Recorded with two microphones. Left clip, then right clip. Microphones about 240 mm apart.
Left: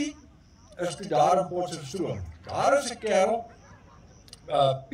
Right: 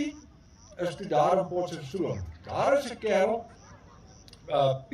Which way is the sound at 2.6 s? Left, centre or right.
Left.